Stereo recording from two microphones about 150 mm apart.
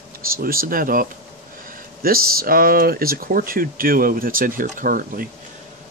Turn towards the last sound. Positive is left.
turn(degrees=-65)  # may be behind; listen again after turning